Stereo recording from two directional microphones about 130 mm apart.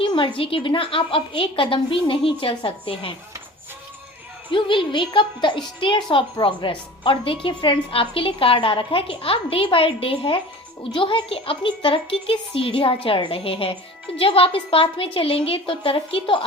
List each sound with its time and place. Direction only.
0.0 s a woman's voice: 40° left (ahead or behind)
4.5 s a woman's voice: 40° left (ahead or behind)